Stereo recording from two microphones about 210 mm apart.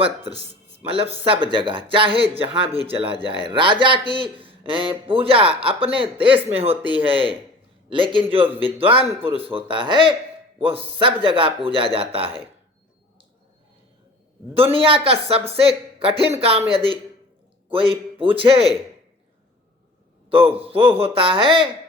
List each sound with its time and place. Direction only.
0.0 s a man's voice: 25° right (ahead or behind)
14.5 s a man's voice: 25° right (ahead or behind)
20.3 s a man's voice: 25° right (ahead or behind)